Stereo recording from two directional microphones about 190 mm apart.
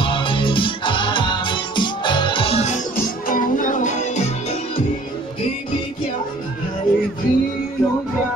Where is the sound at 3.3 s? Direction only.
45° left (ahead or behind).